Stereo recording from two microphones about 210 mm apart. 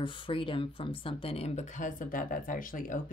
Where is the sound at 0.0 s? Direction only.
25° left (ahead or behind).